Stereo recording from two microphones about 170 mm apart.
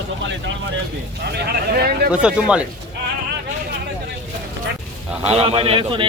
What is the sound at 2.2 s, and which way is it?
Speech, 5° right (ahead or behind).